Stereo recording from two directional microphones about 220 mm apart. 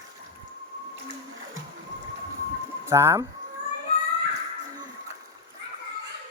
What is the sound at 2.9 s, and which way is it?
Speech, 10° right (ahead or behind).